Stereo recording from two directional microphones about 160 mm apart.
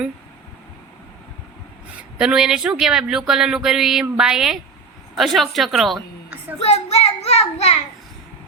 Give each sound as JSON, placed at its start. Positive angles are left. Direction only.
{"t": 2.1, "sound": "speech", "side_deg": -5}
{"t": 6.6, "sound": "a child's voice", "side_deg": 40}